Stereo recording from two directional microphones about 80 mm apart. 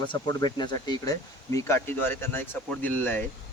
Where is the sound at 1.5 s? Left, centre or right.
Left.